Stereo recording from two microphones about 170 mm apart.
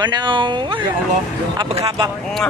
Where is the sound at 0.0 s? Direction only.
25° right (ahead or behind).